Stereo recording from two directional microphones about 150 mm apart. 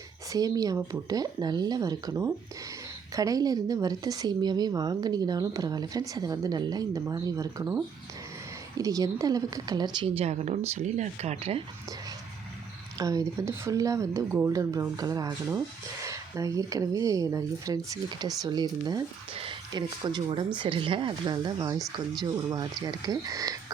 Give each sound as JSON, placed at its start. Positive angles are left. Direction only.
{"t": 0.3, "sound": "speech", "side_deg": -25}
{"t": 10.2, "sound": "speech", "side_deg": -45}
{"t": 13.0, "sound": "speech", "side_deg": -25}